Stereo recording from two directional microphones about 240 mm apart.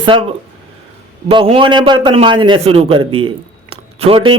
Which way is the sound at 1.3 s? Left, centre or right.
Right.